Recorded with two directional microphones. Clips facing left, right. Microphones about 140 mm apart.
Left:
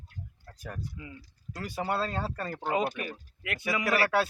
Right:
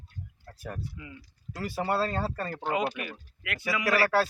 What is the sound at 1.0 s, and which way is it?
Speech, 30° left (ahead or behind).